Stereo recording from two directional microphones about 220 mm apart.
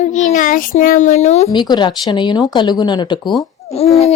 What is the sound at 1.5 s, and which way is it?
Speech, 20° left (ahead or behind).